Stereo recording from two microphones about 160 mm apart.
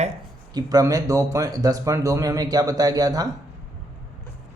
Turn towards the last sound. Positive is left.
turn(degrees=-25)  # may be behind; listen again after turning